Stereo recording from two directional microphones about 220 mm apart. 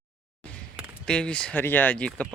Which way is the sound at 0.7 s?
5° left (ahead or behind).